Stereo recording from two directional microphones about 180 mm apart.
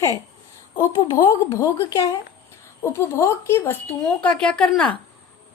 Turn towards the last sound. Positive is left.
turn(degrees=5)  # may be behind; listen again after turning